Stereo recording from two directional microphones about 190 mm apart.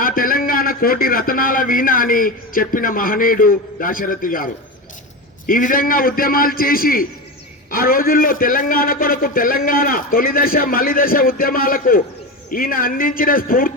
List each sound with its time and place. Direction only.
0.0 s a man's voice: 45° left (ahead or behind)